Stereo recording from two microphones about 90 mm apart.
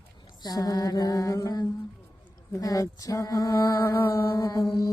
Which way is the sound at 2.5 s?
40° left (ahead or behind).